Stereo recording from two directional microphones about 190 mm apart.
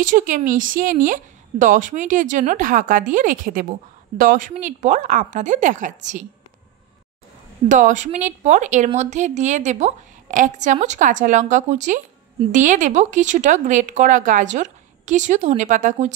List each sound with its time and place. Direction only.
0.0 s a woman's voice: 45° right (ahead or behind)
7.6 s speech: 40° right (ahead or behind)